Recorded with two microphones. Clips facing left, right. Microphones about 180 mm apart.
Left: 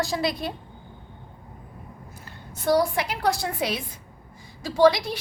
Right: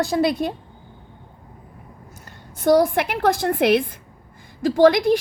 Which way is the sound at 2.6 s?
55° right (ahead or behind).